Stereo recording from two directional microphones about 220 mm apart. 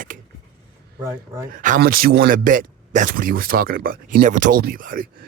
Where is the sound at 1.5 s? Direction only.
40° right (ahead or behind).